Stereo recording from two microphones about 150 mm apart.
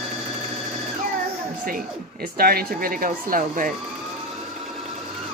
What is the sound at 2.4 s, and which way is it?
Speech, 80° right.